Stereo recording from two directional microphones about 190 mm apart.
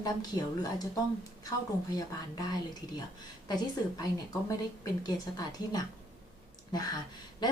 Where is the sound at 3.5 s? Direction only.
20° left (ahead or behind).